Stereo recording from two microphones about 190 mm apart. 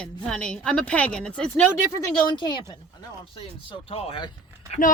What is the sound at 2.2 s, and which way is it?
Speech, 20° left (ahead or behind).